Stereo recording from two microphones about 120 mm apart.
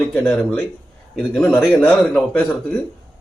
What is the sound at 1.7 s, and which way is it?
Speech, 10° left (ahead or behind).